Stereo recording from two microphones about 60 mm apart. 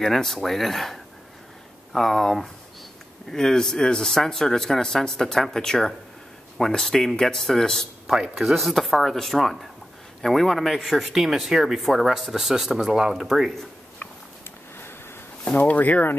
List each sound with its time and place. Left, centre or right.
0.0 s speech: centre
8.2 s speech: centre
13.9 s a sound: left
15.4 s speech: left